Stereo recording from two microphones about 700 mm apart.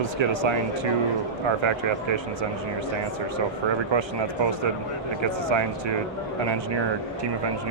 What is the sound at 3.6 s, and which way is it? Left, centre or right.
Speech, right.